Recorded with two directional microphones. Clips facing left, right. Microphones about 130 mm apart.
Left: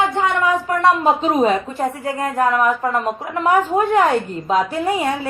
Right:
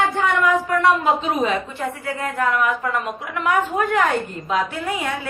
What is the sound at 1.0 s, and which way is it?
A woman's voice, 40° left (ahead or behind).